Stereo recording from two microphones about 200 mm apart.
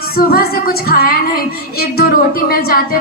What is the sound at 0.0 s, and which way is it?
Female singing, 50° left (ahead or behind).